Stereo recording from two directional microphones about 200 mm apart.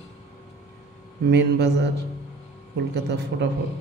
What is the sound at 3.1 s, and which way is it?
Speech, 55° right (ahead or behind).